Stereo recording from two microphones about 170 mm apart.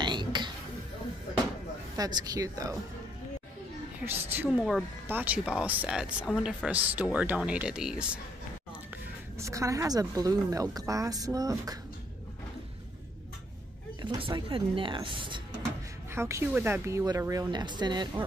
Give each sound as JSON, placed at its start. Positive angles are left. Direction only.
{"t": 0.0, "sound": "a sound", "side_deg": -25}
{"t": 2.0, "sound": "speech", "side_deg": -20}
{"t": 4.0, "sound": "speech", "side_deg": -10}
{"t": 9.4, "sound": "speech", "side_deg": -20}
{"t": 14.0, "sound": "speech", "side_deg": -30}
{"t": 16.1, "sound": "speech", "side_deg": -15}